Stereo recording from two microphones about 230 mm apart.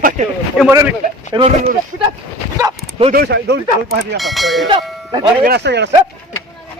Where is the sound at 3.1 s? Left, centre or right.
Right.